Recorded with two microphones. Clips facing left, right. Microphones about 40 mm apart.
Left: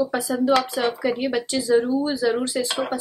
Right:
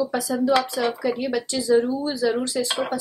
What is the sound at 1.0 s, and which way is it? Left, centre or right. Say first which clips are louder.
Speech: left 1 dB; left.